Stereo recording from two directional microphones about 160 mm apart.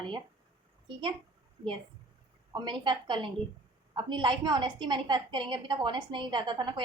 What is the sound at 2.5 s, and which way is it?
A woman's voice, 30° right (ahead or behind).